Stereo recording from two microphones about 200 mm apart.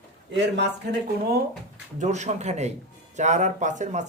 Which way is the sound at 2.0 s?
35° right (ahead or behind).